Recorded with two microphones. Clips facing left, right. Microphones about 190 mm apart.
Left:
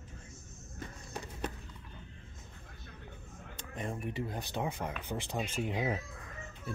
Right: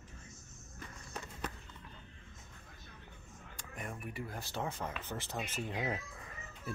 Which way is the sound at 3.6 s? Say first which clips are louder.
Left 6 dB; 25° left (ahead or behind).